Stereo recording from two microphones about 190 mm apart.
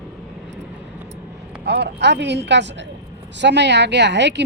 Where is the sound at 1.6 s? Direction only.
65° right (ahead or behind).